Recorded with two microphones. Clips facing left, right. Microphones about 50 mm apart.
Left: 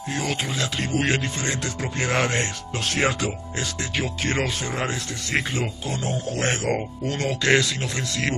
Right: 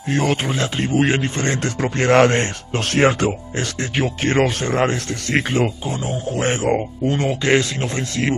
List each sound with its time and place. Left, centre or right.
0.1 s speech: right
1.4 s speech: right
5.9 s speech: centre